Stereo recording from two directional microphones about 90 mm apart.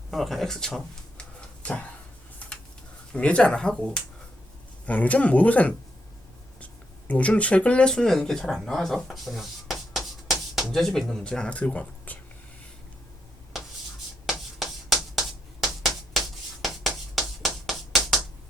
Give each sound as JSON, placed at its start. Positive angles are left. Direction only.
{"t": 0.1, "sound": "speech", "side_deg": 0}
{"t": 3.1, "sound": "speech", "side_deg": 10}
{"t": 7.1, "sound": "speech", "side_deg": 15}
{"t": 14.3, "sound": "rub", "side_deg": 0}
{"t": 15.6, "sound": "hands", "side_deg": 0}